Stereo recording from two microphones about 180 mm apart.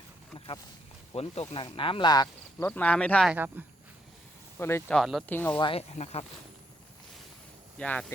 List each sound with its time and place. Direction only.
0.3 s wild animals: 25° left (ahead or behind)
1.1 s speech: 35° left (ahead or behind)
2.6 s speech: 10° left (ahead or behind)
3.2 s speech: 10° right (ahead or behind)
4.5 s speech: 10° left (ahead or behind)
4.9 s speech: centre (ahead or behind)
5.3 s speech: 10° left (ahead or behind)
5.5 s speech: 30° left (ahead or behind)
7.8 s speech: 5° left (ahead or behind)